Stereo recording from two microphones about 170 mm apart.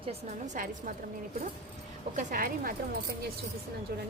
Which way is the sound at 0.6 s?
55° right (ahead or behind).